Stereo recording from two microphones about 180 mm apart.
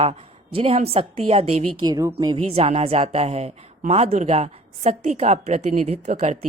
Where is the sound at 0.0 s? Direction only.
35° right (ahead or behind).